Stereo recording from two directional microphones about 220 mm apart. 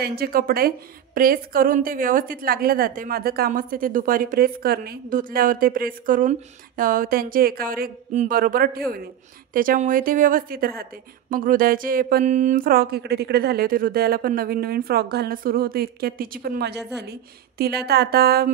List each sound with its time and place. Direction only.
0.0 s a woman's voice: 45° right (ahead or behind)